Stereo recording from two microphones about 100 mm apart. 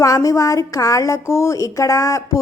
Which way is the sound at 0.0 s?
35° left (ahead or behind).